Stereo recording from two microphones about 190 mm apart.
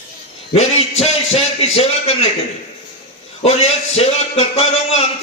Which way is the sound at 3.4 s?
30° left (ahead or behind).